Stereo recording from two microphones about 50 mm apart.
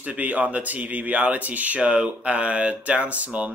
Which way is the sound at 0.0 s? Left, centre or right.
Right.